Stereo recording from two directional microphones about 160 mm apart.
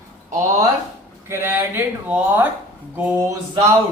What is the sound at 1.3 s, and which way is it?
Speech, 15° right (ahead or behind).